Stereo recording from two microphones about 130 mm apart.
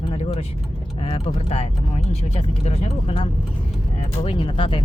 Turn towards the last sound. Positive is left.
turn(degrees=40)  # may be behind; listen again after turning